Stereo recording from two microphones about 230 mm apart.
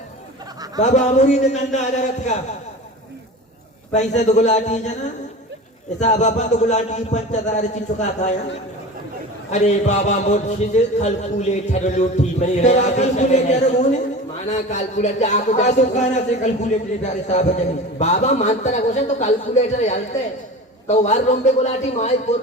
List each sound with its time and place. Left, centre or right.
0.8 s speech: left
3.9 s speech: left
6.0 s speech: left
9.5 s speech: left